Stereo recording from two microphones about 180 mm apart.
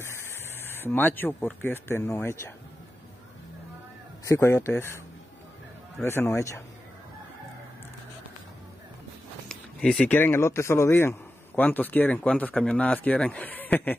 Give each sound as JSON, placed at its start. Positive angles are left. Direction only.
{"t": 0.0, "sound": "speech", "side_deg": 15}
{"t": 4.3, "sound": "speech", "side_deg": 15}
{"t": 6.0, "sound": "speech", "side_deg": 15}
{"t": 9.5, "sound": "speech", "side_deg": 5}